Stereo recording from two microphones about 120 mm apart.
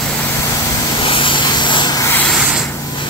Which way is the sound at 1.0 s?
45° left (ahead or behind).